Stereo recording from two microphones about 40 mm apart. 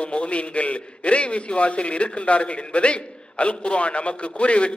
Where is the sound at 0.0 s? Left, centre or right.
Left.